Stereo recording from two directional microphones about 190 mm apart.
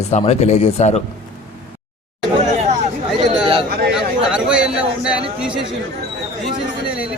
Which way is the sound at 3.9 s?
5° right (ahead or behind).